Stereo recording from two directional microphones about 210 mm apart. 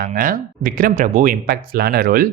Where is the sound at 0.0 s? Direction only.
40° right (ahead or behind).